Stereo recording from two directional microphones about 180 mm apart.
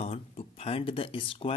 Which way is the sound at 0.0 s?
35° left (ahead or behind).